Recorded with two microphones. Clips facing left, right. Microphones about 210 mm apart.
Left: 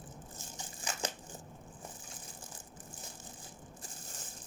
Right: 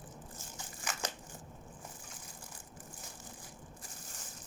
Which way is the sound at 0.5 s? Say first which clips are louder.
Left 1 dB; 30° left (ahead or behind).